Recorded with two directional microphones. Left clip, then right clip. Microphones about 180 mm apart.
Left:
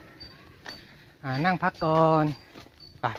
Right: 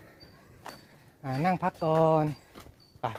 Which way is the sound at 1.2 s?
5° right (ahead or behind).